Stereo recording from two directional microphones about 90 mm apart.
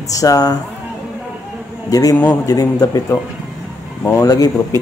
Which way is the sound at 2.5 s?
40° left (ahead or behind).